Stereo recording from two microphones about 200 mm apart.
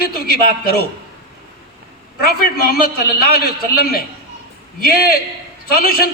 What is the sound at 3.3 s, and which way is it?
A man's voice, 50° left (ahead or behind).